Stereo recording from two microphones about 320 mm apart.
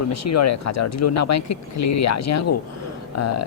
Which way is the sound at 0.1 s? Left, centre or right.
Left.